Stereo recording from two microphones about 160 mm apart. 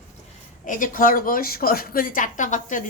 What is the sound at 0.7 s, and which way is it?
A woman's voice, 55° left (ahead or behind).